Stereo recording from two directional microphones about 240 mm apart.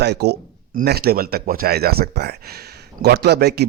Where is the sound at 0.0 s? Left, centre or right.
Right.